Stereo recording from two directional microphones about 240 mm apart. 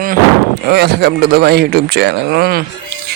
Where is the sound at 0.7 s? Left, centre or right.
Right.